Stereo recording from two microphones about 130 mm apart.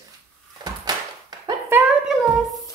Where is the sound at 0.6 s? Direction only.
30° right (ahead or behind).